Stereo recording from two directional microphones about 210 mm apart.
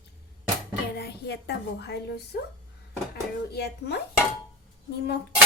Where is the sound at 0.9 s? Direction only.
50° left (ahead or behind).